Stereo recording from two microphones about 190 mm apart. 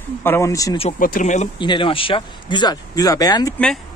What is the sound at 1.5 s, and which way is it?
Speech, 25° left (ahead or behind).